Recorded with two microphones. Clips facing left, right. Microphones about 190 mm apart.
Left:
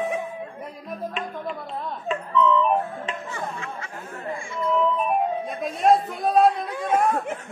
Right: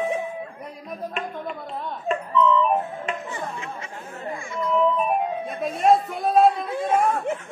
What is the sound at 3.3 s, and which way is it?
Music, 20° right (ahead or behind).